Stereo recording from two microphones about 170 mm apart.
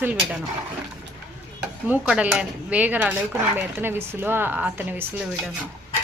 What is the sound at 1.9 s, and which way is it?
Speech, 5° right (ahead or behind).